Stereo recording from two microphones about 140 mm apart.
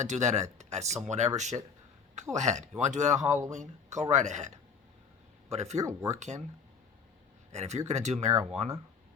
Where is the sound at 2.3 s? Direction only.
55° right (ahead or behind).